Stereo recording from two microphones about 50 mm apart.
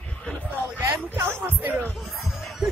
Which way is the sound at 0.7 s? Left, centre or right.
Right.